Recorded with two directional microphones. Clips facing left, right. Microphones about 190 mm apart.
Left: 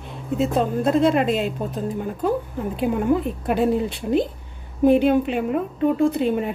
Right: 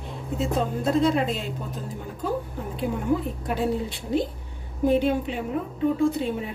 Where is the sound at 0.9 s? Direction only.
65° left (ahead or behind).